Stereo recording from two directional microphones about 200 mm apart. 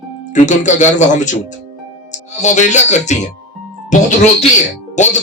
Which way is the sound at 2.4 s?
35° left (ahead or behind).